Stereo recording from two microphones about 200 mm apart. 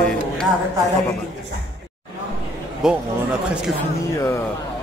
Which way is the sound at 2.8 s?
Centre (ahead or behind).